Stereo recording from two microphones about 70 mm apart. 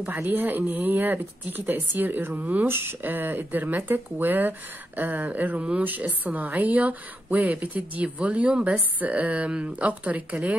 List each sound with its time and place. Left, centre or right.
0.0 s speech: right